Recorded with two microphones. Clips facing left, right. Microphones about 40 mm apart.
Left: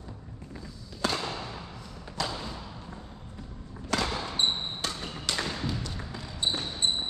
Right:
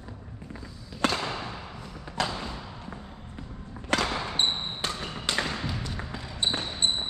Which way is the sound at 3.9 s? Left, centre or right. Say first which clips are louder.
Right 3 dB; right.